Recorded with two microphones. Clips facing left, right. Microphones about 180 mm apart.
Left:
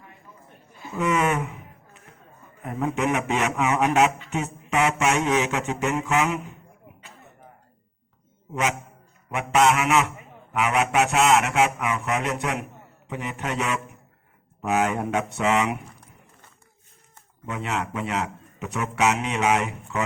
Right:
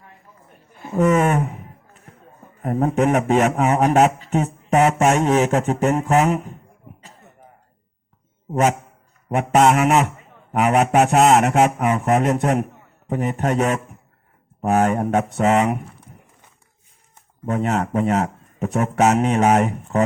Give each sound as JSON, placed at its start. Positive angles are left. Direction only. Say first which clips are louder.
{"t": 0.8, "sound": "a sound", "louder": "right 7 dB", "side_deg": -45}
{"t": 2.6, "sound": "speech", "louder": "right 7 dB", "side_deg": -40}
{"t": 9.3, "sound": "speech", "louder": "right 5 dB", "side_deg": -45}
{"t": 17.4, "sound": "speech", "louder": "right 8 dB", "side_deg": -45}